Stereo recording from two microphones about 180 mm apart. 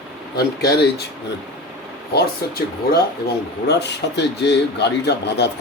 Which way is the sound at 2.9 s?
65° left (ahead or behind).